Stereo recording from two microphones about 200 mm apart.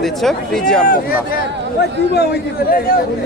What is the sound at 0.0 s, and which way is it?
Speech, centre (ahead or behind).